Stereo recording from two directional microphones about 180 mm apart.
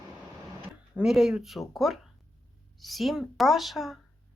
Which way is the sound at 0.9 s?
Centre (ahead or behind).